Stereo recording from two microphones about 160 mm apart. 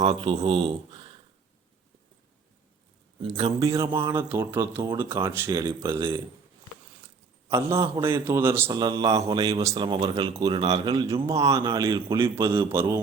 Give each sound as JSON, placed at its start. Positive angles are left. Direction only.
{"t": 0.0, "sound": "a man's voice", "side_deg": -35}
{"t": 3.2, "sound": "a man's voice", "side_deg": -35}
{"t": 3.7, "sound": "speech", "side_deg": -20}
{"t": 7.5, "sound": "speech", "side_deg": -20}
{"t": 8.7, "sound": "speech", "side_deg": -25}